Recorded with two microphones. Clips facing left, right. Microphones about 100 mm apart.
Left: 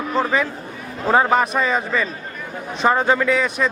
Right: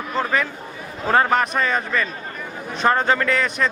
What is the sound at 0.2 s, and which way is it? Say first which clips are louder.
A man's voice: left 2 dB; 10° left (ahead or behind).